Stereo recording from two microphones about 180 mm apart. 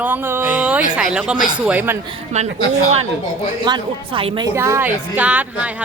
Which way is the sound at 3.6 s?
25° right (ahead or behind).